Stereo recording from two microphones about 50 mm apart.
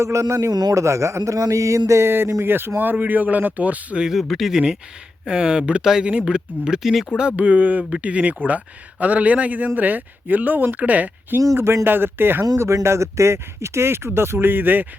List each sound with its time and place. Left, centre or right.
0.0 s a man's voice: right
2.0 s speech: right
4.0 s speech: centre
4.5 s speech: centre
6.1 s speech: right
6.8 s speech: centre
7.3 s speech: right
11.5 s speech: right
11.9 s speech: right